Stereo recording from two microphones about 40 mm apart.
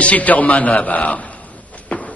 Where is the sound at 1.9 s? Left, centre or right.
Left.